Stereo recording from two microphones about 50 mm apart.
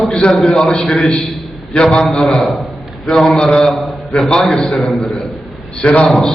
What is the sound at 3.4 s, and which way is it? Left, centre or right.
Mantra, centre.